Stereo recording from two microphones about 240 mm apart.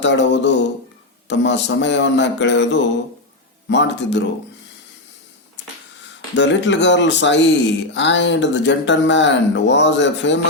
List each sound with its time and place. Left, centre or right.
0.0 s speech: left
3.7 s speech: left
6.3 s speech: left